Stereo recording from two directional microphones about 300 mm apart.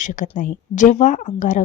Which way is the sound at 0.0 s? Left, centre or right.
Left.